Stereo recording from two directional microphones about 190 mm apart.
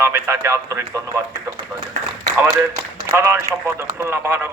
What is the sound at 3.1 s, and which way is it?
A man's voice, 15° right (ahead or behind).